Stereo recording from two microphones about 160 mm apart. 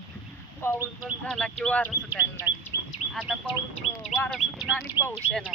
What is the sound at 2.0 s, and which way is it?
Speech, 10° right (ahead or behind).